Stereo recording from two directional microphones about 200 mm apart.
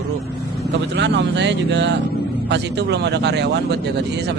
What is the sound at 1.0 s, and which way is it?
Speech, 60° right (ahead or behind).